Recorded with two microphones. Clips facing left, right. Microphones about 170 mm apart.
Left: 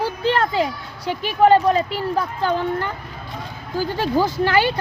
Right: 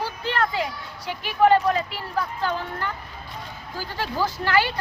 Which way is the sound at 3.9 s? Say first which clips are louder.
Left 6 dB; 20° left (ahead or behind).